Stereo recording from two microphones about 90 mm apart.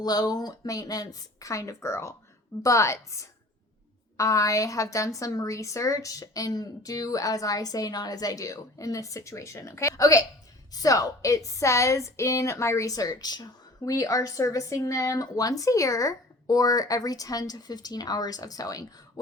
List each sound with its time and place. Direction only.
0.0 s a woman's voice: 45° left (ahead or behind)